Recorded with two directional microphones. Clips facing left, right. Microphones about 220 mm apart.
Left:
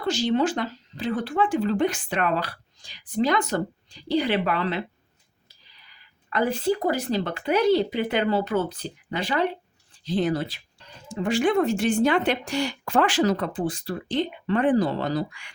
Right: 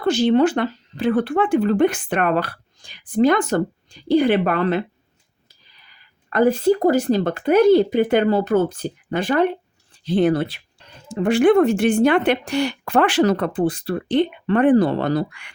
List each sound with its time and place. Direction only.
0.0 s speech: 55° right (ahead or behind)
6.3 s speech: 50° right (ahead or behind)